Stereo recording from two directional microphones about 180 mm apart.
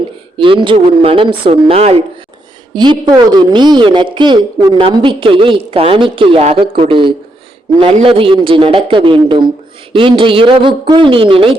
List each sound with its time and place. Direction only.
0.3 s a woman's voice: 25° right (ahead or behind)